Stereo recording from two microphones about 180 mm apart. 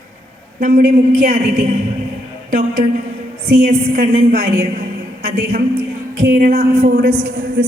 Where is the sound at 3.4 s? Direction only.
60° right (ahead or behind).